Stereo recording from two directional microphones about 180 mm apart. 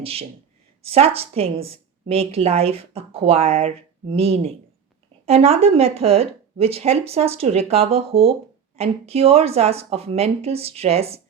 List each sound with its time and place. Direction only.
0.0 s speech: 35° right (ahead or behind)